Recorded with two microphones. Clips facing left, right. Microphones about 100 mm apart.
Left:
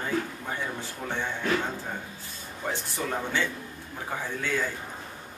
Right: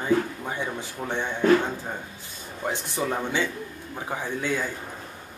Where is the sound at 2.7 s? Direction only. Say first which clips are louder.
Right 3 dB; 20° right (ahead or behind).